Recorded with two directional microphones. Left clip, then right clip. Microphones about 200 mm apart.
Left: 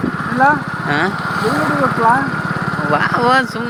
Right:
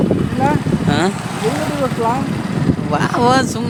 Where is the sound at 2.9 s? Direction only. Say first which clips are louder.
Left 1 dB; 40° right (ahead or behind).